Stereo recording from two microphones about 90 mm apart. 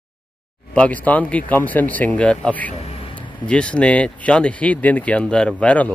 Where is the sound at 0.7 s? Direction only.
15° left (ahead or behind).